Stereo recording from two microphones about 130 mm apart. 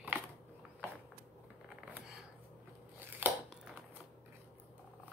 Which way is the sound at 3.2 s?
15° right (ahead or behind).